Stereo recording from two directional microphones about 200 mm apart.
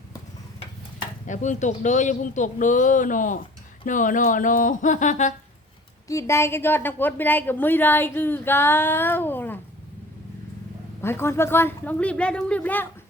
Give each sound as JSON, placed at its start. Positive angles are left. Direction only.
{"t": 1.3, "sound": "speech", "side_deg": 40}
{"t": 6.1, "sound": "a woman's voice", "side_deg": 15}
{"t": 11.0, "sound": "a woman's voice", "side_deg": 10}